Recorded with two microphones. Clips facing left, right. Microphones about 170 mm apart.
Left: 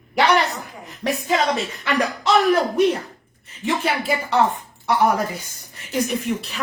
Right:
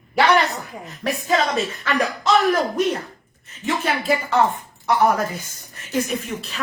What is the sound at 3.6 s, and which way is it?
Speech, 10° left (ahead or behind).